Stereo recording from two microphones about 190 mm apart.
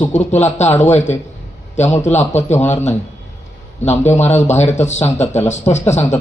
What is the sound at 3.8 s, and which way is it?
A man's voice, 35° left (ahead or behind).